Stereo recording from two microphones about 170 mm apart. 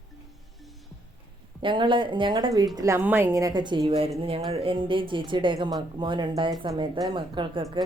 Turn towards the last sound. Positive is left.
turn(degrees=-30)  # may be behind; listen again after turning